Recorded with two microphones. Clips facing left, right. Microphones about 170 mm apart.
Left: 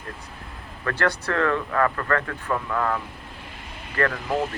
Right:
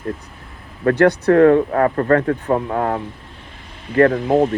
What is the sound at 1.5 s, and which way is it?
Speech, 35° right (ahead or behind).